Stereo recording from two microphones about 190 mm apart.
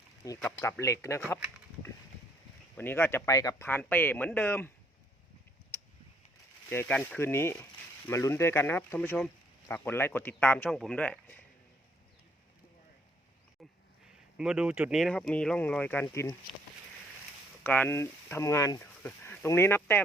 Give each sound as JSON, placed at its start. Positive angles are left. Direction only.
{"t": 0.2, "sound": "speech", "side_deg": 15}
{"t": 2.7, "sound": "speech", "side_deg": 10}
{"t": 5.7, "sound": "a sound", "side_deg": 10}
{"t": 6.7, "sound": "speech", "side_deg": 10}
{"t": 14.3, "sound": "speech", "side_deg": -5}
{"t": 17.6, "sound": "speech", "side_deg": 10}